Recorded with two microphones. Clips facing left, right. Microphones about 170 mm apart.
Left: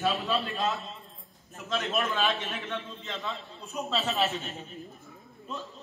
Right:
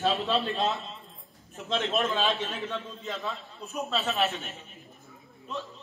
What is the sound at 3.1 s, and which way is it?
A man's voice, centre (ahead or behind).